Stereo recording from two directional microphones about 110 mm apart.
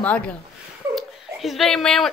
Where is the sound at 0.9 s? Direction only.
Centre (ahead or behind).